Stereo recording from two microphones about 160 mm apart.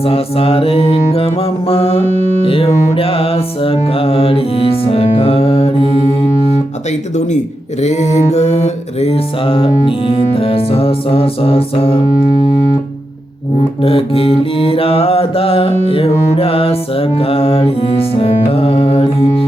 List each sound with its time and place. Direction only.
0.0 s mantra: 35° left (ahead or behind)
2.9 s music: 35° left (ahead or behind)
7.8 s mantra: 45° left (ahead or behind)
13.8 s mantra: 35° left (ahead or behind)
15.9 s music: 35° left (ahead or behind)